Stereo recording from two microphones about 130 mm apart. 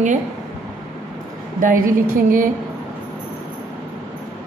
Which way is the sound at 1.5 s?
90° right.